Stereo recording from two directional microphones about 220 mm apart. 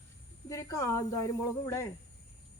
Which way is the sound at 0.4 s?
15° left (ahead or behind).